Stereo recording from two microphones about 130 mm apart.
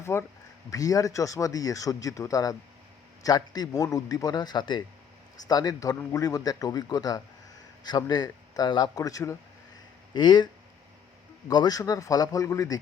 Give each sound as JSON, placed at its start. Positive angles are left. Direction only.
{"t": 0.0, "sound": "a man's voice", "side_deg": 20}
{"t": 10.2, "sound": "a man's voice", "side_deg": 35}